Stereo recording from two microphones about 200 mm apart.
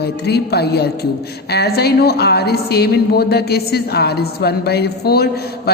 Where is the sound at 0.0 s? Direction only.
55° left (ahead or behind).